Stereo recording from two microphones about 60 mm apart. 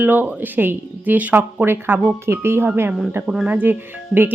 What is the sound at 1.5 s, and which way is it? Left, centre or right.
Speech, right.